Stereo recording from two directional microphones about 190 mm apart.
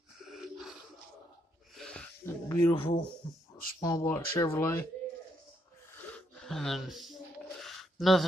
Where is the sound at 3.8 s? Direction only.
15° left (ahead or behind).